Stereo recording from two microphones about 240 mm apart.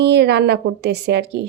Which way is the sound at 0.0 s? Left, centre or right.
Right.